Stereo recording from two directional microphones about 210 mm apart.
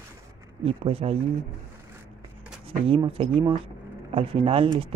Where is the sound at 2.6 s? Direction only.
25° right (ahead or behind).